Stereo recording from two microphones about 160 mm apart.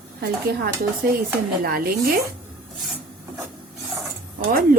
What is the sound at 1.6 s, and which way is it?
Speech, 70° right (ahead or behind).